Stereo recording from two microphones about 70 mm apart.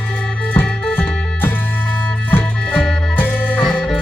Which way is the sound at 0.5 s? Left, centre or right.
Left.